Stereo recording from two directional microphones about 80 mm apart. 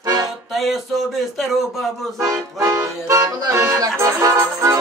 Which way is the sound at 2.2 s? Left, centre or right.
Right.